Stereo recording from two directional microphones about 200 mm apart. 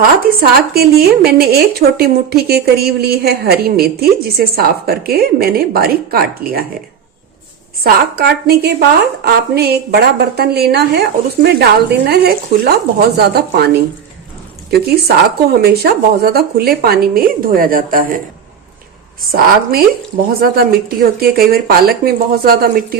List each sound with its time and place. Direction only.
0.3 s speech: 50° right (ahead or behind)
7.9 s speech: 50° right (ahead or behind)
19.3 s speech: 50° right (ahead or behind)